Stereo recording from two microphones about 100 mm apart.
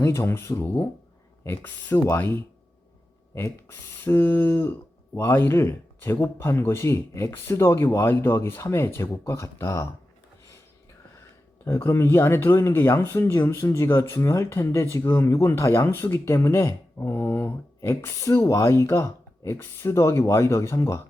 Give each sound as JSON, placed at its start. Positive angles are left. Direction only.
{"t": 0.0, "sound": "speech", "side_deg": 25}
{"t": 11.6, "sound": "speech", "side_deg": 25}